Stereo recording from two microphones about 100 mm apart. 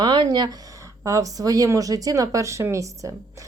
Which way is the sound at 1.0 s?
35° right (ahead or behind).